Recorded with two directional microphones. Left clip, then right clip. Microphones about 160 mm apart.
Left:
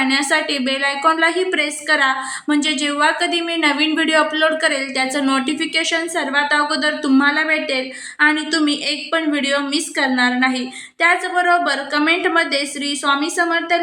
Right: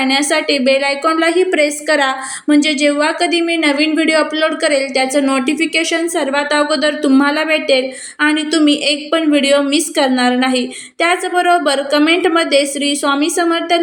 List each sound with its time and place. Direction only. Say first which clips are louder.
0.0 s a woman's voice: right 3 dB; 10° right (ahead or behind)